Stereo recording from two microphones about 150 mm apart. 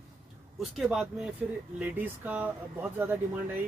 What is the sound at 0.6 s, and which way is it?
Speech, centre (ahead or behind).